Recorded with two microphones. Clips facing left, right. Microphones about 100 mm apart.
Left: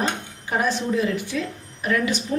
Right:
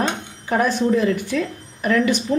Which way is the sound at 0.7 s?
50° right (ahead or behind).